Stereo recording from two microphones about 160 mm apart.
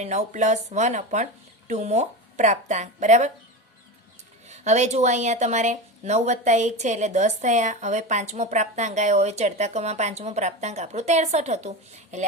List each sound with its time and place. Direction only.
0.0 s speech: 45° right (ahead or behind)
4.4 s speech: 45° right (ahead or behind)